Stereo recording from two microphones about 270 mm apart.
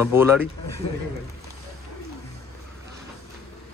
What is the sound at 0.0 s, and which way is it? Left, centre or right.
Speech, centre.